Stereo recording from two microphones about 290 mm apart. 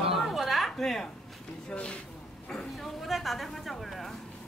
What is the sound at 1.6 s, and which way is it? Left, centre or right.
A woman's voice, centre.